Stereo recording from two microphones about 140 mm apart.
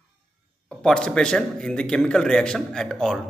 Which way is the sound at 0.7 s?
5° left (ahead or behind).